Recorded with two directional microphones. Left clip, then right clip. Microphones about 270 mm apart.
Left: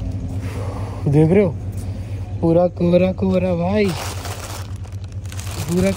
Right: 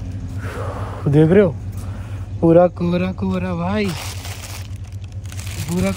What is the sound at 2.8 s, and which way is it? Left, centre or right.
Speech, centre.